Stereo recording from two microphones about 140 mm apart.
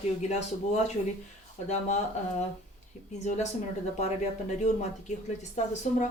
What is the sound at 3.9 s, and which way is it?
Speech, 55° left (ahead or behind).